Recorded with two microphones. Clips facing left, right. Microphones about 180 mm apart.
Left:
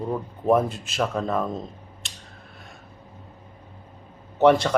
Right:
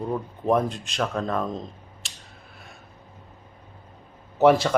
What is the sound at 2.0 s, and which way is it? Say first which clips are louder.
Scissors: left 1 dB; centre (ahead or behind).